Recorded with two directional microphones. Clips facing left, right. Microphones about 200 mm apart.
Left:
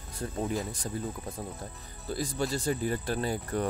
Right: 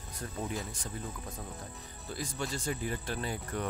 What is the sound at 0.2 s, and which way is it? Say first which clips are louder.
Speech: left 6 dB; 30° left (ahead or behind).